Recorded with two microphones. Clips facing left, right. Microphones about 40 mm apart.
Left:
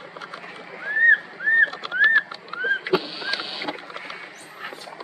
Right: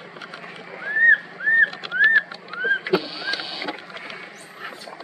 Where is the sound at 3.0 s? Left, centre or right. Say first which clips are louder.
Right 1 dB; left.